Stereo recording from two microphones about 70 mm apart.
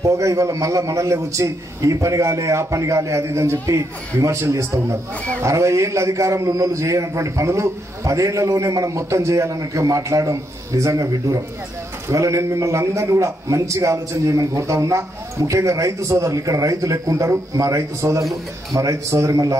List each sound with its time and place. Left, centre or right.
0.0 s a man's voice: right